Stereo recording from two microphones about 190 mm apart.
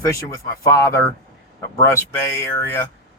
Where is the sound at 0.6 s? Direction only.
15° left (ahead or behind).